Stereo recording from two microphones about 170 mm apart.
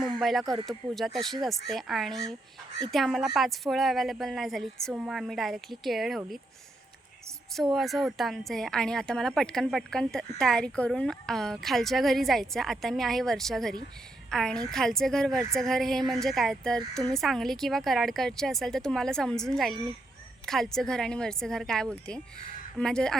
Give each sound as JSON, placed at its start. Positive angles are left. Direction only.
{"t": 0.0, "sound": "a sound", "side_deg": 0}
{"t": 0.4, "sound": "speech", "side_deg": -25}
{"t": 0.7, "sound": "a woman's voice", "side_deg": 0}
{"t": 7.5, "sound": "a woman's voice", "side_deg": 0}